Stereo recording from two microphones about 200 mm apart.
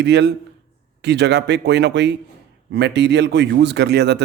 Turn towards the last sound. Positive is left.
turn(degrees=-55)  # may be behind; listen again after turning